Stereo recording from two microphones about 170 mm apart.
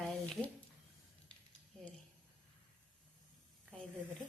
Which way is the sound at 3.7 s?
5° left (ahead or behind).